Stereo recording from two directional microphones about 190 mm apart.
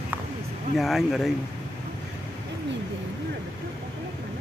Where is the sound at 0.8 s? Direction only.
Centre (ahead or behind).